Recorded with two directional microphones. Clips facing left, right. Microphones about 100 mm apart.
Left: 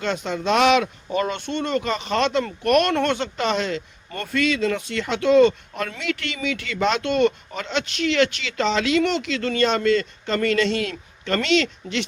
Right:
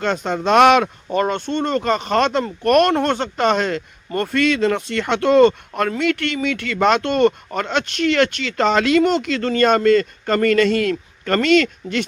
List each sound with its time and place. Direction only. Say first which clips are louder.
0.0 s speech: right 4 dB; 45° right (ahead or behind)